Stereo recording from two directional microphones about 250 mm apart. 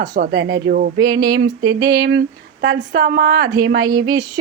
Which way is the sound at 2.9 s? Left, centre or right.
Right.